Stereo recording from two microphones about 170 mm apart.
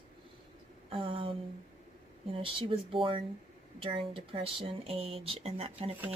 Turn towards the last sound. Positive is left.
turn(degrees=-35)  # may be behind; listen again after turning